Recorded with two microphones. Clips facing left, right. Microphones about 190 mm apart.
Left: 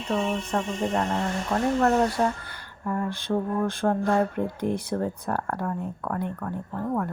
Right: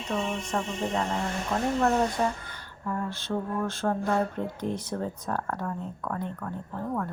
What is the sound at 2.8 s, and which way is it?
Speech, 15° left (ahead or behind).